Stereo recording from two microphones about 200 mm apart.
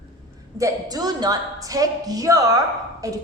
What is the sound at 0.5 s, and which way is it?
A woman's voice, 15° right (ahead or behind).